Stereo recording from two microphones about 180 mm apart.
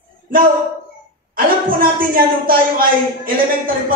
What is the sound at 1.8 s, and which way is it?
Speech, 50° right (ahead or behind).